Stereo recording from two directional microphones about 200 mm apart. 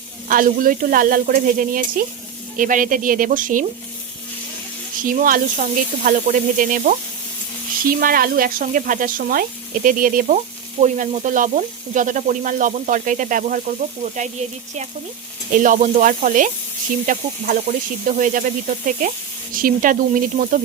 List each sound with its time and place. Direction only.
0.3 s speech: 45° right (ahead or behind)
5.0 s speech: 45° right (ahead or behind)
15.5 s speech: 40° right (ahead or behind)